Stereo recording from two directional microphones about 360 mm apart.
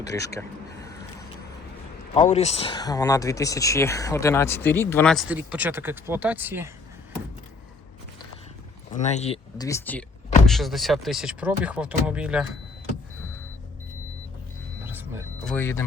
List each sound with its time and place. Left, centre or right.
0.0 s speech: centre
2.1 s speech: centre
8.9 s speech: centre
14.8 s a sound: centre
15.5 s speech: centre